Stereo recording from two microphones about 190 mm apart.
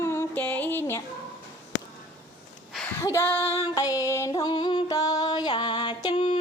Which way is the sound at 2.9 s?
15° left (ahead or behind).